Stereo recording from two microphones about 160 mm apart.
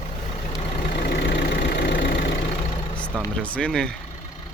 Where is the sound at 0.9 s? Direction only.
90° left.